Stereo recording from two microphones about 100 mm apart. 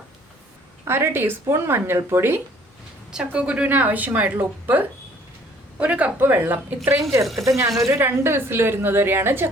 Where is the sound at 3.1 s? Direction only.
10° right (ahead or behind); by 7.7 s 35° right (ahead or behind).